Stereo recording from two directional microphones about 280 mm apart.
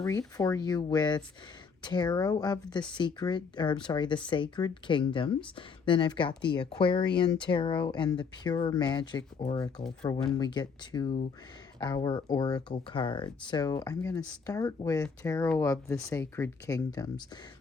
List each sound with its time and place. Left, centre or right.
0.0 s speech: centre